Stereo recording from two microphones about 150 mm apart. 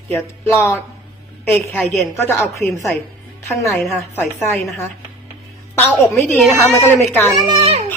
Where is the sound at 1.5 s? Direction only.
15° left (ahead or behind).